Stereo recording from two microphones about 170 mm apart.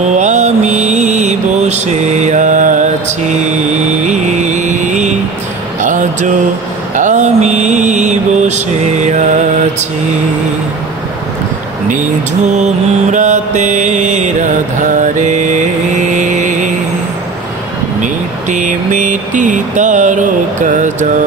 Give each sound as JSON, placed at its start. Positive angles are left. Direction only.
{"t": 0.1, "sound": "mantra", "side_deg": -45}
{"t": 3.9, "sound": "music", "side_deg": -45}
{"t": 5.8, "sound": "a sound", "side_deg": -50}
{"t": 7.0, "sound": "mantra", "side_deg": -45}
{"t": 11.9, "sound": "mantra", "side_deg": -45}
{"t": 18.0, "sound": "a sound", "side_deg": -45}